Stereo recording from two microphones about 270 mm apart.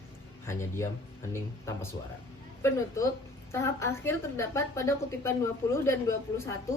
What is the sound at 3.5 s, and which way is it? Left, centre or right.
A woman's voice, centre.